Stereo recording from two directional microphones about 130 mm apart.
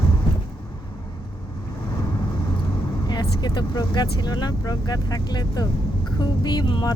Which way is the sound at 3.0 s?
35° left (ahead or behind).